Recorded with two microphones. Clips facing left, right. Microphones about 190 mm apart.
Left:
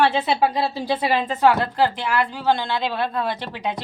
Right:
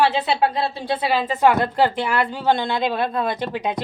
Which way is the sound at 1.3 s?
20° right (ahead or behind).